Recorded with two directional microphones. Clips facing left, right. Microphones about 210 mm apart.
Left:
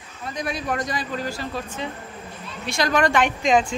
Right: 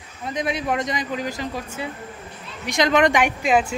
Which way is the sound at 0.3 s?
20° right (ahead or behind).